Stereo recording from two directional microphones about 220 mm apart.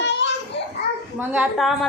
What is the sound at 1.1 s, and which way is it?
Speech, 5° right (ahead or behind).